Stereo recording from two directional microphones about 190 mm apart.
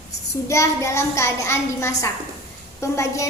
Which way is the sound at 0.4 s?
15° left (ahead or behind).